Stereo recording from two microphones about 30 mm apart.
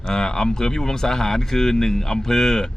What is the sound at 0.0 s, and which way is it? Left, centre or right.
Speech, left.